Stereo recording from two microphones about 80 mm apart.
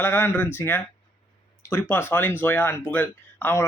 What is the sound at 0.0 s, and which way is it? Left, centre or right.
Speech, left.